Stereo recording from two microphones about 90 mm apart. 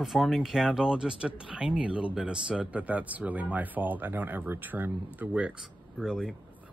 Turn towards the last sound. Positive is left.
turn(degrees=-5)  # may be behind; listen again after turning